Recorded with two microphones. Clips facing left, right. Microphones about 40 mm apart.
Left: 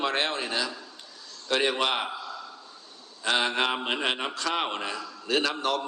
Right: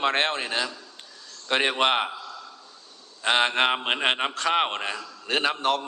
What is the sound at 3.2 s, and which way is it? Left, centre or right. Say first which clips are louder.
Speech: right 4 dB; right.